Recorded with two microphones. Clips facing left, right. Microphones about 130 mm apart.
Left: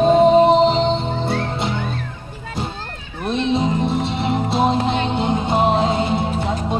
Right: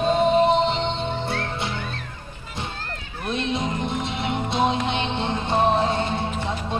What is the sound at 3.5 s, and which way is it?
Music, 30° left (ahead or behind).